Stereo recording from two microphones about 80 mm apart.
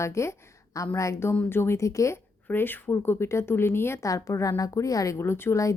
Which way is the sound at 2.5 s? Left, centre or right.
Left.